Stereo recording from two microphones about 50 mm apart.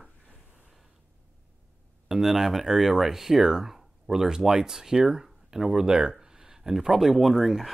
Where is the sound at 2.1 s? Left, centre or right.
Centre.